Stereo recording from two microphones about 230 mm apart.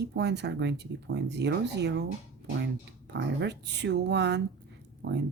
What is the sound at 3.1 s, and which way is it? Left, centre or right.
Speech, right.